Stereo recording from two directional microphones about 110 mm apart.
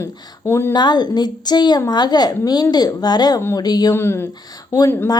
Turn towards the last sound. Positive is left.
turn(degrees=20)  # may be behind; listen again after turning